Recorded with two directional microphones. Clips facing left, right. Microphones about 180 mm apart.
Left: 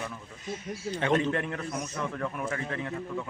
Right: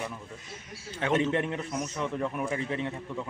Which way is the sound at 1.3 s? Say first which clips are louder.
Right 2 dB; 20° right (ahead or behind).